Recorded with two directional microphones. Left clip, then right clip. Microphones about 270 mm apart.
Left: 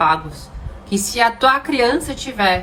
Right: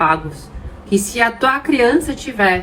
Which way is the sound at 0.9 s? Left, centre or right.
Left.